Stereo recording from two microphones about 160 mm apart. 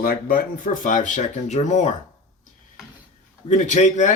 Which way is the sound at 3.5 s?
50° left (ahead or behind).